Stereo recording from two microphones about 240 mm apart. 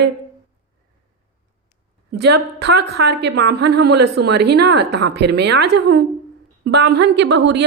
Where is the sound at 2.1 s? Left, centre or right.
Right.